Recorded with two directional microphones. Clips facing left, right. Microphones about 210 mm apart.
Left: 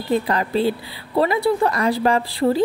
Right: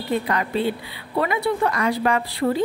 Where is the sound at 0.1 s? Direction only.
35° left (ahead or behind).